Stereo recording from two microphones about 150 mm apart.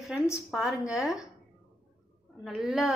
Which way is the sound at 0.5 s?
Centre (ahead or behind).